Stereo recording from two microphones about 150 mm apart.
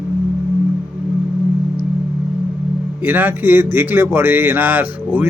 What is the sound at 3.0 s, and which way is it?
Speech, 15° right (ahead or behind).